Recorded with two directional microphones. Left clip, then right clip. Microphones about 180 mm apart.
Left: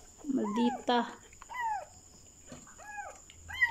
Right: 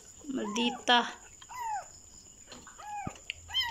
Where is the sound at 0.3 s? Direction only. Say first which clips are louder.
Left 1 dB; 20° left (ahead or behind).